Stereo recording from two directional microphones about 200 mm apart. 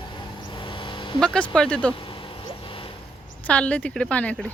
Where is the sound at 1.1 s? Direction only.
5° left (ahead or behind).